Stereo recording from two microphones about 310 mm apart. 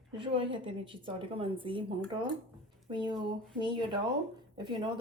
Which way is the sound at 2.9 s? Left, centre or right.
Centre.